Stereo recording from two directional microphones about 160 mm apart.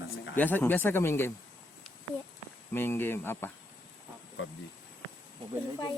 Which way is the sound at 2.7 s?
15° left (ahead or behind).